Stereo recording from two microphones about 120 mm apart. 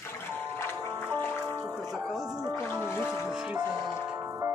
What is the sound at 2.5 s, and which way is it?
Music, 15° left (ahead or behind).